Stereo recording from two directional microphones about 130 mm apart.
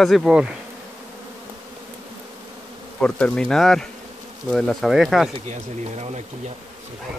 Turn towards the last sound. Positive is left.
turn(degrees=-55)  # may be behind; listen again after turning